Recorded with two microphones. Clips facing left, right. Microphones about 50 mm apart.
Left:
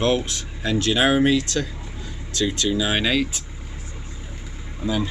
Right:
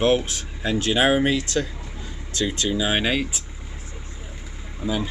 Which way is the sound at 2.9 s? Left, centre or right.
Centre.